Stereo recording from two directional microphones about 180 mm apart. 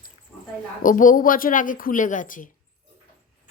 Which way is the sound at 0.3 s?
5° left (ahead or behind).